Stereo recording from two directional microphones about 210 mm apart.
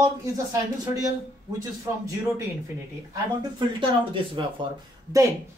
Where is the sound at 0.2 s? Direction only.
15° right (ahead or behind).